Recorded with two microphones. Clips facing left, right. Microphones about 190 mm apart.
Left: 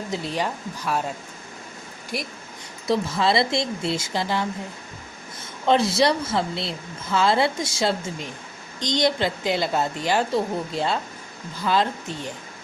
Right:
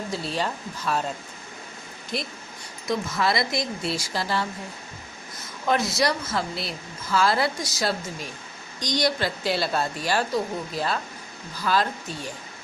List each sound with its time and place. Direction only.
0.1 s speech: 20° left (ahead or behind)
2.1 s speech: 10° left (ahead or behind)
2.8 s speech: 30° left (ahead or behind)
5.6 s speech: 30° left (ahead or behind)